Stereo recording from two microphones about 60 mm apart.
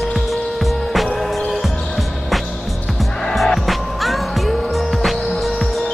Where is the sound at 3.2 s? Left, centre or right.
Centre.